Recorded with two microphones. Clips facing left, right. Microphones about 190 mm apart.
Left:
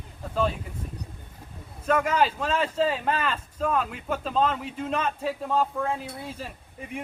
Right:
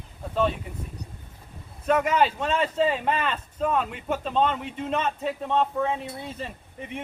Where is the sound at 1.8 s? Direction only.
5° right (ahead or behind).